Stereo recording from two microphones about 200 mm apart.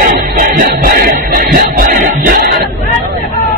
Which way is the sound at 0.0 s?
45° right (ahead or behind).